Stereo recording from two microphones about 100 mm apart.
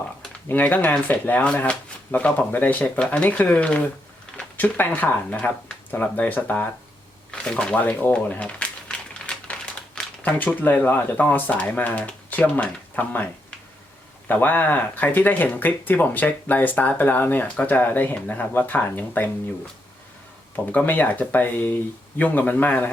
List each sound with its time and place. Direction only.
0.4 s speech: 15° left (ahead or behind)
14.3 s speech: 20° left (ahead or behind)
20.7 s speech: 15° left (ahead or behind)